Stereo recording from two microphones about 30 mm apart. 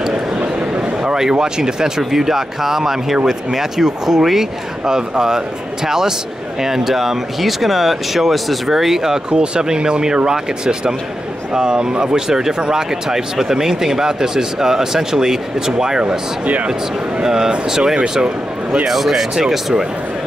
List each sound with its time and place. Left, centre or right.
1.4 s speech: centre
9.3 s speech: right
17.2 s speech: centre
18.9 s speech: centre